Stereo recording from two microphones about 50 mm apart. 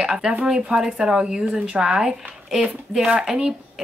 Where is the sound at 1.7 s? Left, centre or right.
Centre.